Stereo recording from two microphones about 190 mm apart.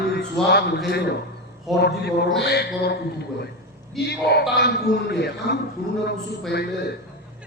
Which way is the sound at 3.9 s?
60° left (ahead or behind).